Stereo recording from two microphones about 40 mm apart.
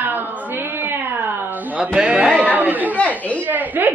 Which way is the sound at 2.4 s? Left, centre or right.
Right.